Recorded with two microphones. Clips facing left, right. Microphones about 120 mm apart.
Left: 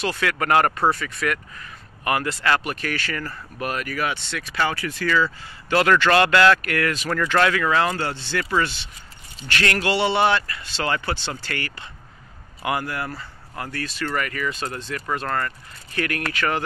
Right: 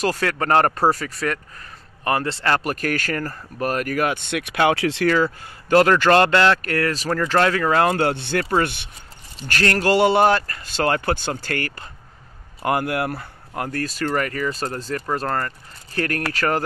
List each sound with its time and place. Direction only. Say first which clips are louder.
0.0 s speech: right 2 dB; 40° right (ahead or behind); by 5.1 s 80° right
5.1 s a man's voice: right 2 dB; 50° right (ahead or behind)
6.3 s speech: even; 30° right (ahead or behind)
7.8 s speech: right 5 dB; 55° right (ahead or behind)
9.5 s a man's voice: right 4 dB; 40° right (ahead or behind); by 13.7 s 60° right (ahead or behind)
13.7 s speech: right 4 dB; 40° right (ahead or behind)